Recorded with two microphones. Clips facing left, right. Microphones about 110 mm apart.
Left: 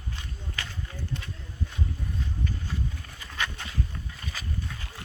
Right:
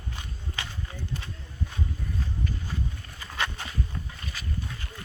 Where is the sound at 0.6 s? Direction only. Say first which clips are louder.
Right 1 dB; 20° right (ahead or behind).